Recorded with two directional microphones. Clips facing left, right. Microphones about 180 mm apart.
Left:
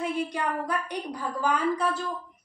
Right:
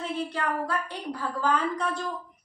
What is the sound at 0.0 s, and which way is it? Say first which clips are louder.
A woman's voice: left 2 dB; 15° left (ahead or behind).